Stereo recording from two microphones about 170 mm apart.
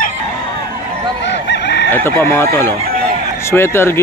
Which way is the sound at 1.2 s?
90° left.